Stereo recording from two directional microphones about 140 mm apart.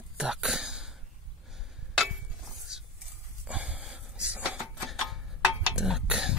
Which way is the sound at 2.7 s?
5° right (ahead or behind).